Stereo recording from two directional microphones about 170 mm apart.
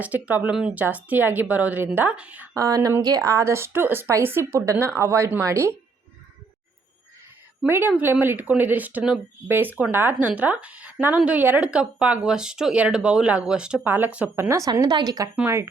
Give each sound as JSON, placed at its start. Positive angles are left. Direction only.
{"t": 0.0, "sound": "speech", "side_deg": -10}
{"t": 2.6, "sound": "speech", "side_deg": -20}
{"t": 7.6, "sound": "speech", "side_deg": -10}